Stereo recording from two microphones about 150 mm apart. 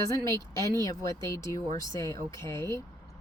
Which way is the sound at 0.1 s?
20° left (ahead or behind).